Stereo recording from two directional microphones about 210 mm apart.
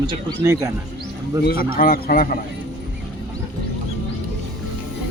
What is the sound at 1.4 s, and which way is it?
A man's voice, 45° left (ahead or behind).